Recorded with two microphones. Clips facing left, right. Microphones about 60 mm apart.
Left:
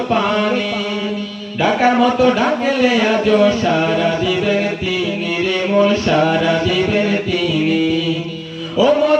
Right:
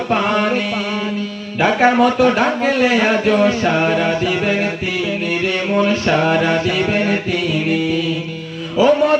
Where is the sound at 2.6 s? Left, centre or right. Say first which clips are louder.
Even; right.